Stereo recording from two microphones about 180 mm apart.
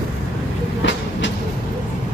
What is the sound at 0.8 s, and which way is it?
Train, 90° left.